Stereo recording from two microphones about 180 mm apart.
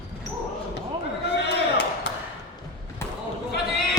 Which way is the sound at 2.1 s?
80° left.